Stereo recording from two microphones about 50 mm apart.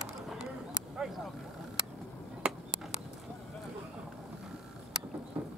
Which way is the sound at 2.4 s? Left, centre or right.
Centre.